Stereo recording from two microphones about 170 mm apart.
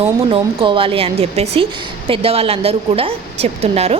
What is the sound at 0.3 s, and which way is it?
A woman's voice, 30° right (ahead or behind).